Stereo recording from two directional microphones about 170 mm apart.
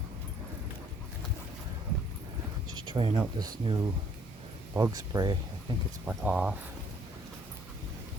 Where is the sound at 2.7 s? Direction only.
25° right (ahead or behind).